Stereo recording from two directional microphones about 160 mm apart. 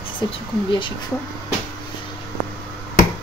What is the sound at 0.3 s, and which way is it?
Speech, 30° left (ahead or behind).